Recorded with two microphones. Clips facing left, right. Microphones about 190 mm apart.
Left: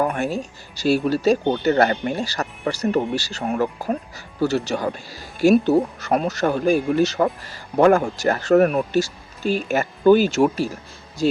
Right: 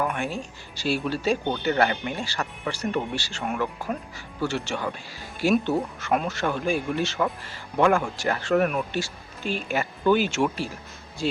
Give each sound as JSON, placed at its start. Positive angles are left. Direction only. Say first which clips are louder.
{"t": 0.0, "sound": "speech", "louder": "left 5 dB", "side_deg": 40}